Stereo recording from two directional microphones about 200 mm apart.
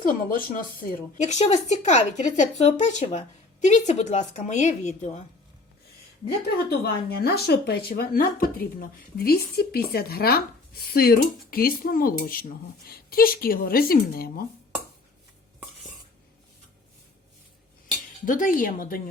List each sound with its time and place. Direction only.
0.0 s a woman's voice: 45° left (ahead or behind)
6.2 s speech: 55° left (ahead or behind)
18.3 s speech: 40° left (ahead or behind)